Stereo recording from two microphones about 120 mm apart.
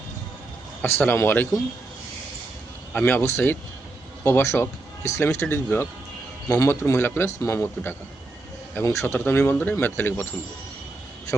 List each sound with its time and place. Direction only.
0.8 s speech: 15° left (ahead or behind)
2.9 s speech: 15° left (ahead or behind)